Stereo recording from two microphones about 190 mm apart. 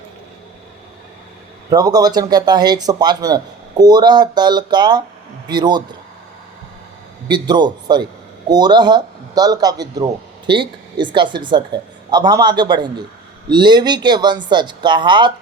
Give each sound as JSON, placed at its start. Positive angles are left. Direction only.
{"t": 1.7, "sound": "speech", "side_deg": -20}
{"t": 7.3, "sound": "speech", "side_deg": -25}